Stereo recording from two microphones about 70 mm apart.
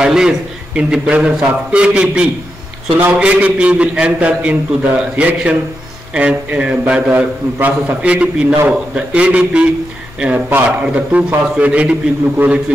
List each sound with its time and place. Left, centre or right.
0.0 s a man's voice: centre
7.1 s a man's voice: right